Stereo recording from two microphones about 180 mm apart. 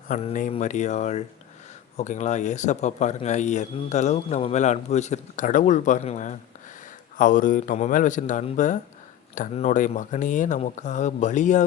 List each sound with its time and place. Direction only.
0.1 s speech: 35° left (ahead or behind)